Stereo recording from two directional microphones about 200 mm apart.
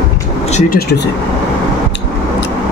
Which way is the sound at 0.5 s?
45° left (ahead or behind).